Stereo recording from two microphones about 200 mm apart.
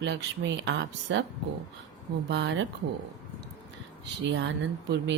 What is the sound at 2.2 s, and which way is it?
Speech, 65° right (ahead or behind).